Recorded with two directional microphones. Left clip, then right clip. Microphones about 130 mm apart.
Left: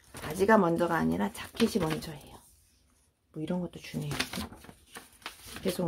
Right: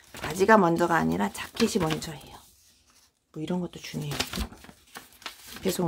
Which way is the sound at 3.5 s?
10° right (ahead or behind).